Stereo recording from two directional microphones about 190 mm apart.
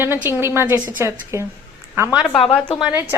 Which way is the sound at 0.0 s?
10° right (ahead or behind).